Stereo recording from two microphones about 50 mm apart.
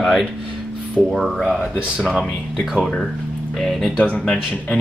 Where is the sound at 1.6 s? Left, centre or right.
Right.